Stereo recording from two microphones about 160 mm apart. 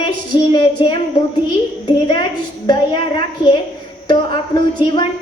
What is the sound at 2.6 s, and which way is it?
A woman's voice, 30° left (ahead or behind).